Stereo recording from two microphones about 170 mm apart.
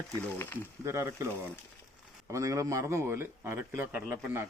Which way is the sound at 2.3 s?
20° right (ahead or behind).